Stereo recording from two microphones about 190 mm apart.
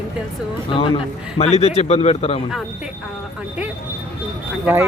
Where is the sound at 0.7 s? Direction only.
25° left (ahead or behind).